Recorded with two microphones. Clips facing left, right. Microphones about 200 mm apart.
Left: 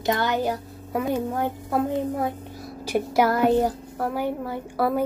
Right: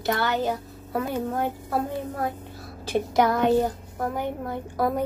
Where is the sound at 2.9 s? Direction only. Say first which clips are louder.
Left 1 dB; 10° left (ahead or behind).